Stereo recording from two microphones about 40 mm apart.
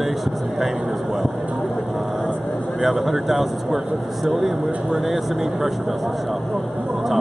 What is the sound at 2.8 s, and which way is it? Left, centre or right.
Speech, centre.